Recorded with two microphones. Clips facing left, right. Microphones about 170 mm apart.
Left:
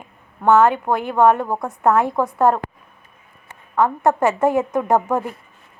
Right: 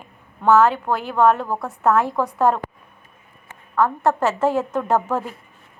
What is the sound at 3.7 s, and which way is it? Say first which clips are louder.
A woman's voice: left 2 dB; 15° left (ahead or behind).